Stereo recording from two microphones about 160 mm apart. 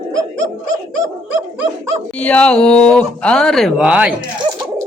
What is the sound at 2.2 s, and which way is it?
Speech, 5° left (ahead or behind).